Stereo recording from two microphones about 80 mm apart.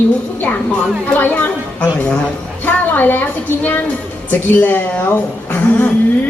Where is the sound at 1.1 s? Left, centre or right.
Left.